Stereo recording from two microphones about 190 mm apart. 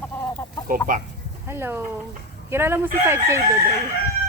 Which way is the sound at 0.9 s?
45° right (ahead or behind).